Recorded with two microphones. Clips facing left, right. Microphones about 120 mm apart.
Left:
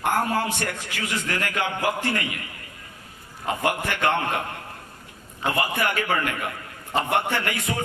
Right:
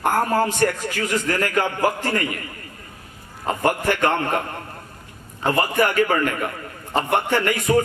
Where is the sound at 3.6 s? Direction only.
40° right (ahead or behind).